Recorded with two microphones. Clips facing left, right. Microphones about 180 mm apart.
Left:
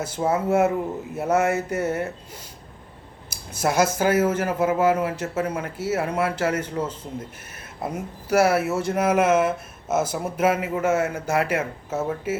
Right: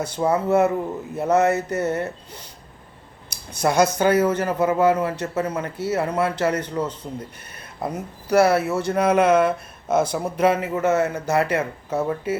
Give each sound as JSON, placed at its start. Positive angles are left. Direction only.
{"t": 0.0, "sound": "speech", "side_deg": 5}